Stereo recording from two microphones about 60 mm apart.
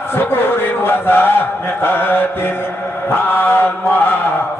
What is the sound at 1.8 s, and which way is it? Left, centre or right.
Chant, left.